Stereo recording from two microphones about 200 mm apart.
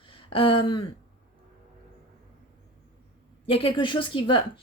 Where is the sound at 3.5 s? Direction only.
25° left (ahead or behind).